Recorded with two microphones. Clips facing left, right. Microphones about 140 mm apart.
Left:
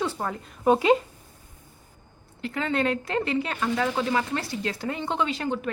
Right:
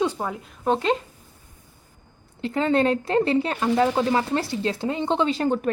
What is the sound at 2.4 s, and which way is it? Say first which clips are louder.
Speech: right 6 dB; 30° right (ahead or behind).